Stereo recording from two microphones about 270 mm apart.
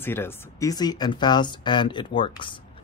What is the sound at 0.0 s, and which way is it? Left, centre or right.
Speech, centre.